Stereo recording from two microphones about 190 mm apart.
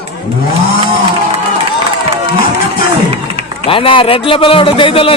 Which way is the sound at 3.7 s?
25° left (ahead or behind).